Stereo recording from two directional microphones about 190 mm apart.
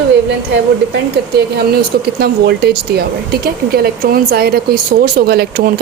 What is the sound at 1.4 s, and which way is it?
Speech, 55° right (ahead or behind).